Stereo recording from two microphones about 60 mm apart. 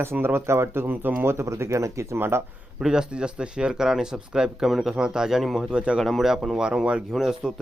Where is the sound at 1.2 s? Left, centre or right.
Right.